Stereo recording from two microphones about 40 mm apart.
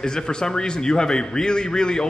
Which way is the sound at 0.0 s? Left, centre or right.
Centre.